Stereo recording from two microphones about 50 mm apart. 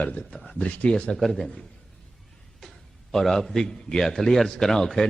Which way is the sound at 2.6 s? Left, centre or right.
Centre.